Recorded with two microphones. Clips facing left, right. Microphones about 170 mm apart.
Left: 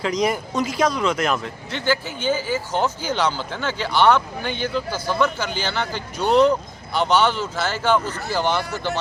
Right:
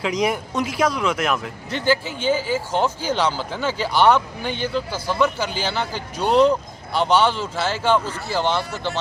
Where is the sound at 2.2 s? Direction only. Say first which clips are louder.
Right 1 dB; 5° right (ahead or behind).